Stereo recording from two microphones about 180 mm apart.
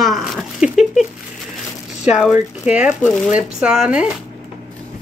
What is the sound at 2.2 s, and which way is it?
Speech, 5° right (ahead or behind).